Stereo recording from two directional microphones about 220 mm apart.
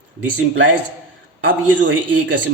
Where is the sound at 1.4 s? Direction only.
55° right (ahead or behind).